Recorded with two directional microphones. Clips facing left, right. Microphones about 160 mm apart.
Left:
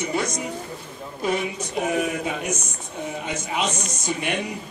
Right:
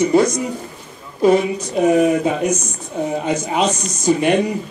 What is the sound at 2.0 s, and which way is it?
A man's voice, 35° right (ahead or behind).